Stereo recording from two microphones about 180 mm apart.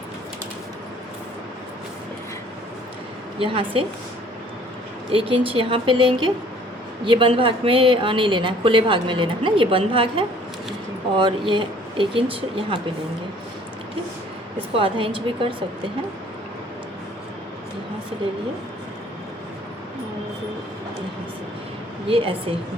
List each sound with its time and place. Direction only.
3.3 s a woman's voice: 30° right (ahead or behind)
5.1 s a woman's voice: 30° right (ahead or behind)
14.8 s a woman's voice: 30° right (ahead or behind)
22.0 s a woman's voice: 30° right (ahead or behind)